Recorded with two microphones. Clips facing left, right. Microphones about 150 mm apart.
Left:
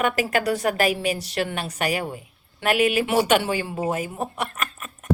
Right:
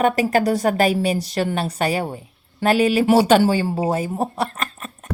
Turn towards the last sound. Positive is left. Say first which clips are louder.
# right 2 dB
turn(degrees=-30)  # may be behind; listen again after turning